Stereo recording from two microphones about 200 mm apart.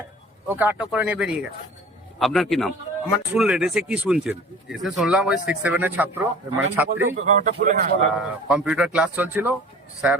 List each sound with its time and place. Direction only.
0.4 s a man's voice: 10° right (ahead or behind)
7.2 s a man's voice: 40° right (ahead or behind)
8.2 s speech: 5° right (ahead or behind)